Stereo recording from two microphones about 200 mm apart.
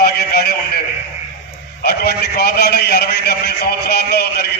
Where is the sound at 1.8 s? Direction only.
50° left (ahead or behind).